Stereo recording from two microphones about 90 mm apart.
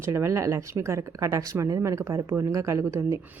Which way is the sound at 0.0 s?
30° right (ahead or behind).